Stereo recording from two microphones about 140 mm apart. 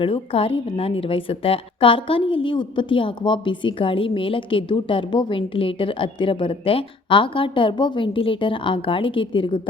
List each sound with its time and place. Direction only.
0.0 s a woman's voice: 40° left (ahead or behind)